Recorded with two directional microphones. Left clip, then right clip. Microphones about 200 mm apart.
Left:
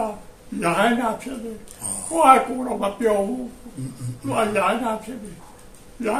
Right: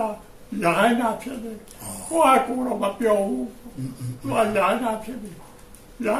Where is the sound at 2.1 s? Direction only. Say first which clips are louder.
Left 3 dB; 5° left (ahead or behind).